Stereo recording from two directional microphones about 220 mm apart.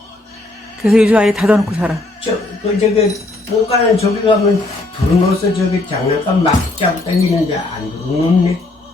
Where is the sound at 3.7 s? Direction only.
30° left (ahead or behind).